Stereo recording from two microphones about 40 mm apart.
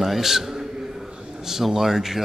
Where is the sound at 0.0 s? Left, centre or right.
Centre.